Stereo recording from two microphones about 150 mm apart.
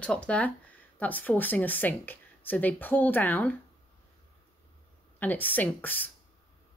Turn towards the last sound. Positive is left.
turn(degrees=10)  # may be behind; listen again after turning